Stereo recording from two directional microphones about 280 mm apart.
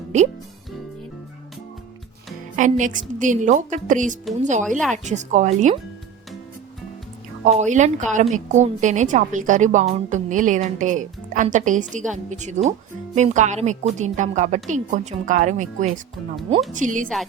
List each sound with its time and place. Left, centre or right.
2.6 s a woman's voice: right
7.4 s a woman's voice: right